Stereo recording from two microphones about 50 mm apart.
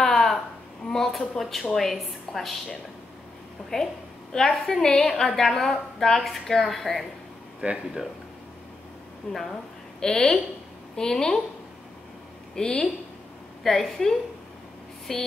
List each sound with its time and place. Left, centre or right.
0.0 s a sound: centre
1.4 s a woman's voice: centre
7.6 s speech: right
9.3 s a woman's voice: centre
12.5 s a woman's voice: centre